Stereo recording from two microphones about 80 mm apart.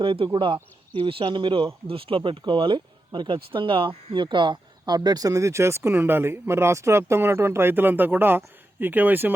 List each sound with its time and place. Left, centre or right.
0.0 s speech: right